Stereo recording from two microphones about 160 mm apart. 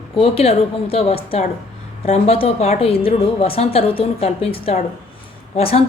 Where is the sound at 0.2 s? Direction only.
40° left (ahead or behind).